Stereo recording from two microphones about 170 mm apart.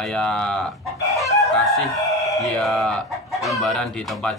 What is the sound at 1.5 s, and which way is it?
Crowing, centre (ahead or behind).